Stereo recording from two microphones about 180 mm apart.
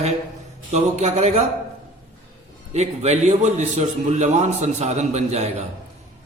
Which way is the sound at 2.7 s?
40° right (ahead or behind).